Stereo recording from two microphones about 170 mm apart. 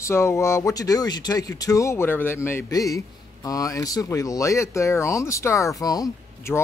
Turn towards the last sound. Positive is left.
turn(degrees=20)  # may be behind; listen again after turning